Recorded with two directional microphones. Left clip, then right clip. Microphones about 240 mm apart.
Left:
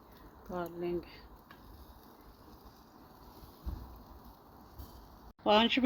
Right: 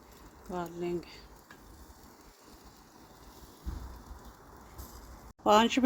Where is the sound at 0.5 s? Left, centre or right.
Right.